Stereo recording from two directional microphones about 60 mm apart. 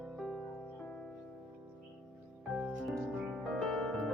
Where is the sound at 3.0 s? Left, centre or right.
Centre.